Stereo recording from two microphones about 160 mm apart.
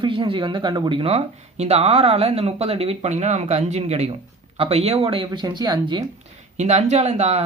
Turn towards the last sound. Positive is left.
turn(degrees=-45)  # may be behind; listen again after turning